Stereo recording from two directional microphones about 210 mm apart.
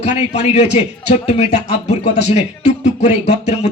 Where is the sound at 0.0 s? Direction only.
30° left (ahead or behind).